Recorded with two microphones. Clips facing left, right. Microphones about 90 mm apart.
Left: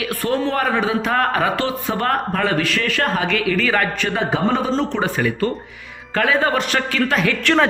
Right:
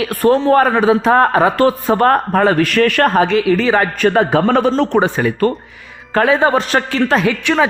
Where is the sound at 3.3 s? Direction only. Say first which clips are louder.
Right 6 dB; 25° right (ahead or behind).